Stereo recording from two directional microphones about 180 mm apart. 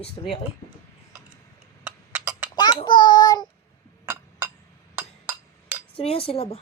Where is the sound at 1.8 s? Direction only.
10° right (ahead or behind).